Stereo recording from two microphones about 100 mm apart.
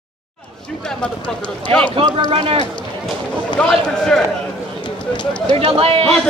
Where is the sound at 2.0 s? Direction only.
70° right (ahead or behind).